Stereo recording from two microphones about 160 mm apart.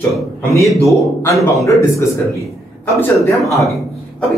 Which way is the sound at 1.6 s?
20° left (ahead or behind).